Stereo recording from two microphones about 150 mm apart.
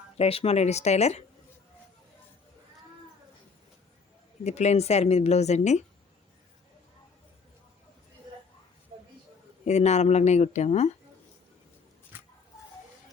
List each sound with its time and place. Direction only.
0.2 s speech: 40° left (ahead or behind)
4.4 s speech: 50° left (ahead or behind)
9.6 s speech: 50° left (ahead or behind)
12.1 s a sound: 15° right (ahead or behind)